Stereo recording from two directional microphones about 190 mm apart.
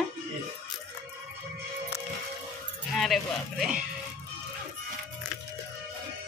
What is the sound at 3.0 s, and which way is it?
Speech, centre (ahead or behind).